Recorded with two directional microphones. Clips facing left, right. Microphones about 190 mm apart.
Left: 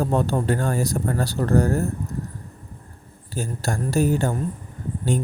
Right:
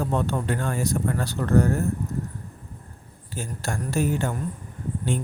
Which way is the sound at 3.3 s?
35° left (ahead or behind).